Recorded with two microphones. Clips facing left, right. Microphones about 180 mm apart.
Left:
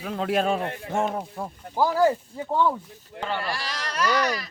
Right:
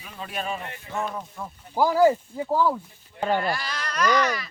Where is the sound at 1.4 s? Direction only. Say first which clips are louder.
Left 4 dB; 35° left (ahead or behind).